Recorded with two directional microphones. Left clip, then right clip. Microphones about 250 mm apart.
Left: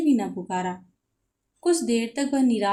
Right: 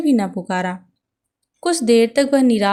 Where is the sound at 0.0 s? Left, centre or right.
Right.